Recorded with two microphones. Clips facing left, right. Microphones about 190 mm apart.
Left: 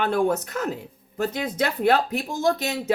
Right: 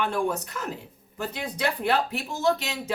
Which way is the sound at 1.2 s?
45° left (ahead or behind).